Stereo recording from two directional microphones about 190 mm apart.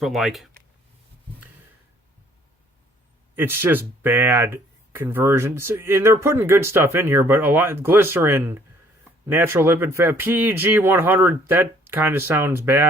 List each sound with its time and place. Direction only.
0.0 s speech: centre (ahead or behind)
3.3 s speech: 10° right (ahead or behind)